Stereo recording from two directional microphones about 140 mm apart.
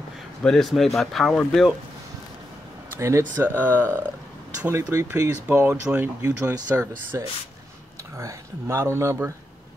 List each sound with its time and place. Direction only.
0.4 s speech: 5° left (ahead or behind)
3.0 s speech: 20° right (ahead or behind)